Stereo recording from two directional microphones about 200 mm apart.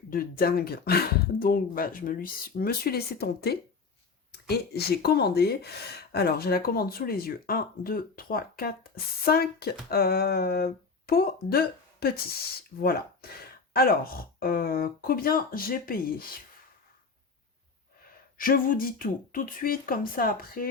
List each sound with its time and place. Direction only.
0.1 s speech: 45° left (ahead or behind)
18.3 s speech: 45° left (ahead or behind)